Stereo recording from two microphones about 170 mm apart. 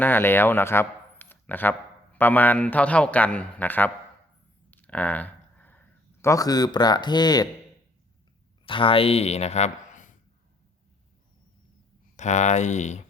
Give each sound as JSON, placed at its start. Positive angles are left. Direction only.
{"t": 0.0, "sound": "a man's voice", "side_deg": 10}
{"t": 4.7, "sound": "a sound", "side_deg": 10}
{"t": 6.2, "sound": "speech", "side_deg": 20}
{"t": 8.6, "sound": "speech", "side_deg": 30}
{"t": 12.1, "sound": "speech", "side_deg": 45}